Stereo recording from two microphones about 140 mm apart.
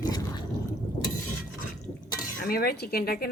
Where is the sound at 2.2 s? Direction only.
85° left.